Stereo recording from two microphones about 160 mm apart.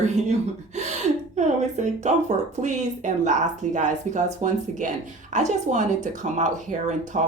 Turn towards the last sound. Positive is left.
turn(degrees=-50)  # may be behind; listen again after turning